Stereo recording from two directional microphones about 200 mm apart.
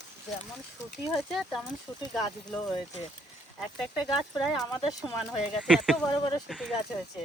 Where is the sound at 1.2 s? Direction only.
Centre (ahead or behind).